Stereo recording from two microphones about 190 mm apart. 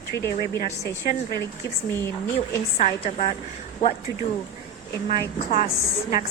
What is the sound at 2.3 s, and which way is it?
A woman's voice, 35° left (ahead or behind).